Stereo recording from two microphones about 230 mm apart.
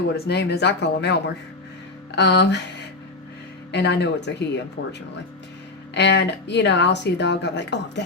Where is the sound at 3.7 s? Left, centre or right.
Left.